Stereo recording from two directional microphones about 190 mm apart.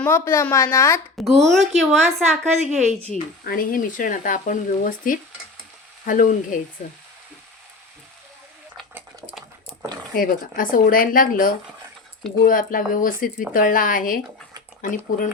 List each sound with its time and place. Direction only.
0.0 s a woman's voice: 10° left (ahead or behind)
1.2 s speech: centre (ahead or behind)
3.1 s speech: 45° left (ahead or behind)
10.2 s speech: 45° left (ahead or behind)